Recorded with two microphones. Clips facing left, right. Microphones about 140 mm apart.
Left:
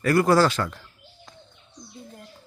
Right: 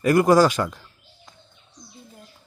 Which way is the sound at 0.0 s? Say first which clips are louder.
Right 3 dB; 15° right (ahead or behind).